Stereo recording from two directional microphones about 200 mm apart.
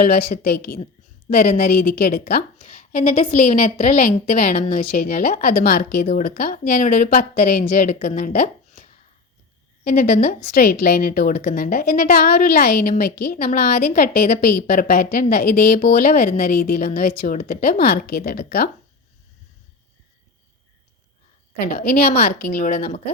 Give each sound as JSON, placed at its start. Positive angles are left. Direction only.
{"t": 0.0, "sound": "a woman's voice", "side_deg": 50}
{"t": 21.6, "sound": "a woman's voice", "side_deg": 45}